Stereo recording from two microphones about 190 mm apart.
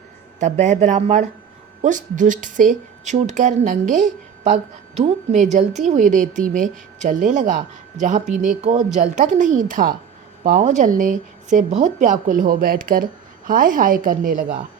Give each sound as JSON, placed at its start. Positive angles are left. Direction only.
{"t": 0.3, "sound": "speech", "side_deg": -40}